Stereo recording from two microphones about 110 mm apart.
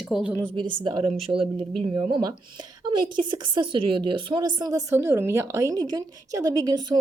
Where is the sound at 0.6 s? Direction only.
45° right (ahead or behind).